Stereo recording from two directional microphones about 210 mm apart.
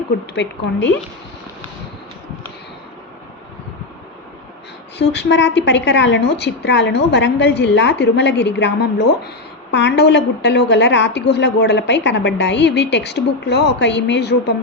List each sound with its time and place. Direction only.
0.3 s a woman's voice: 60° left (ahead or behind)
4.9 s a woman's voice: 55° left (ahead or behind)